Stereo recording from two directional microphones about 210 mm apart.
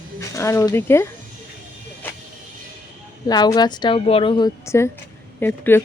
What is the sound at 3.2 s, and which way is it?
Speech, 20° left (ahead or behind).